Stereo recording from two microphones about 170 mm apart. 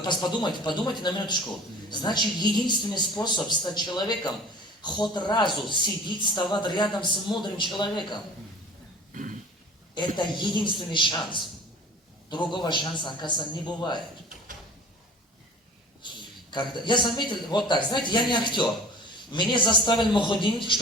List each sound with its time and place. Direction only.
0.0 s a woman's voice: 25° left (ahead or behind)
1.9 s a woman's voice: 25° left (ahead or behind)
9.1 s a sound: 50° right (ahead or behind)
10.2 s a woman's voice: 25° left (ahead or behind)
16.5 s a woman's voice: 25° left (ahead or behind)